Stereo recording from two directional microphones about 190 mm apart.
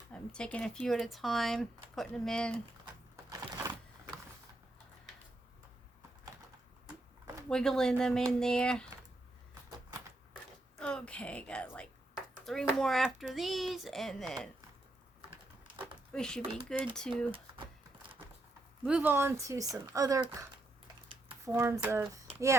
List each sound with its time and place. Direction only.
0.1 s speech: 5° left (ahead or behind)
3.2 s a sound: 20° right (ahead or behind)
7.5 s speech: 5° left (ahead or behind)
10.8 s a woman's voice: 5° left (ahead or behind)
16.1 s speech: 5° left (ahead or behind)
18.9 s speech: 10° right (ahead or behind)
21.4 s speech: 15° right (ahead or behind)